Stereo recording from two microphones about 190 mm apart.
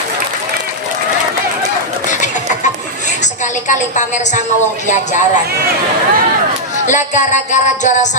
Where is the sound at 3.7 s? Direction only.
40° left (ahead or behind).